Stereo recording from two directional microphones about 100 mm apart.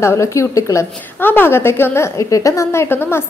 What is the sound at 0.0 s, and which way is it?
A woman's voice, 30° left (ahead or behind).